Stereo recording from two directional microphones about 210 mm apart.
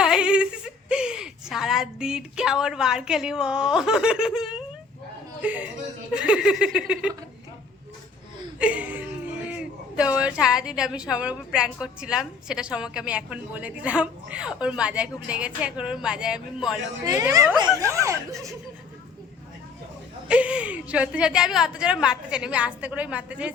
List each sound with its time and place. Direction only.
0.0 s a woman's voice: 5° right (ahead or behind)
8.5 s a sound: 5° right (ahead or behind)
10.2 s a woman's voice: 5° right (ahead or behind)
17.1 s speech: 15° right (ahead or behind)
20.2 s a woman's voice: 5° right (ahead or behind)